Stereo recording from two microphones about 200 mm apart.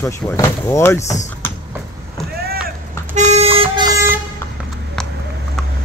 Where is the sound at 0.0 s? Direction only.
15° left (ahead or behind).